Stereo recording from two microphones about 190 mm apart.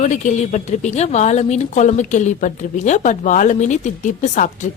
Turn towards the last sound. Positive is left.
turn(degrees=40)  # may be behind; listen again after turning